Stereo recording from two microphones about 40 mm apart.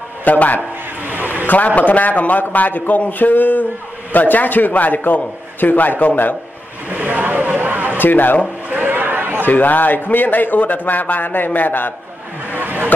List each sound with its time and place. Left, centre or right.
0.2 s a man's voice: left
0.6 s a sound: right
1.8 s a man's voice: left
6.9 s vehicle: right
8.0 s a man's voice: left
8.8 s chatter: right
9.5 s a man's voice: left
12.5 s a sound: right